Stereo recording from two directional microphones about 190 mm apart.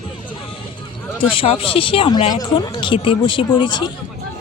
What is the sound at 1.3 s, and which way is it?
Speech, 30° left (ahead or behind).